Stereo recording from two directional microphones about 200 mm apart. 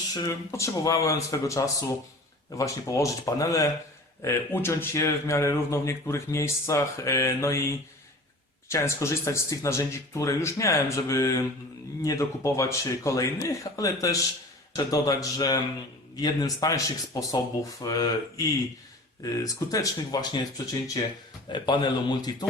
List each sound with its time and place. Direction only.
0.1 s speech: 15° left (ahead or behind)
8.7 s speech: 15° left (ahead or behind)